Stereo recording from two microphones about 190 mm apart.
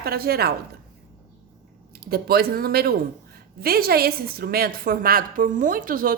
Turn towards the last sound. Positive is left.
turn(degrees=-45)  # may be behind; listen again after turning